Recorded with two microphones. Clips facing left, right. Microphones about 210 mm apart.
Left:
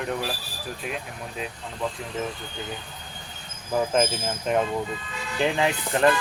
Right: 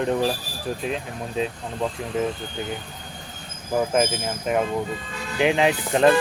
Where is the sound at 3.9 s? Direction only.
5° right (ahead or behind).